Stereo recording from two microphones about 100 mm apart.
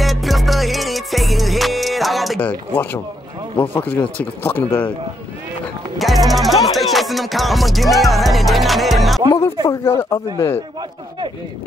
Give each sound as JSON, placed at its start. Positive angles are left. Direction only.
{"t": 0.0, "sound": "music", "side_deg": 0}
{"t": 2.4, "sound": "speech", "side_deg": 20}
{"t": 5.9, "sound": "music", "side_deg": 0}
{"t": 9.7, "sound": "a man's voice", "side_deg": 30}